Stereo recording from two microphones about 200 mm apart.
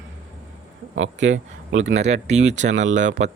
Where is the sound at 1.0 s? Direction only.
70° right (ahead or behind).